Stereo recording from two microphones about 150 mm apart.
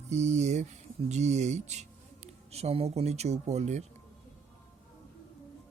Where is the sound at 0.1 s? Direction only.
50° right (ahead or behind).